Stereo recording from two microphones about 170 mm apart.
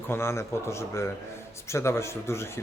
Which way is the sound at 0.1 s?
15° left (ahead or behind).